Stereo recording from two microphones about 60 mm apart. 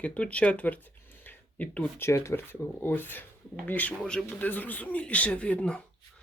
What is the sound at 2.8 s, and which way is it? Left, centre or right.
Speech, left.